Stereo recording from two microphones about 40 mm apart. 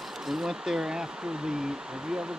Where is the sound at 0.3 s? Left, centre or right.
Centre.